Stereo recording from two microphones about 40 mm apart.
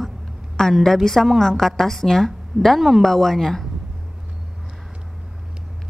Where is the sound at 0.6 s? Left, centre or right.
Left.